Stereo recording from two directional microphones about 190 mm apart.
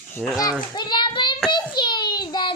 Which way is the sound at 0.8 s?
25° left (ahead or behind).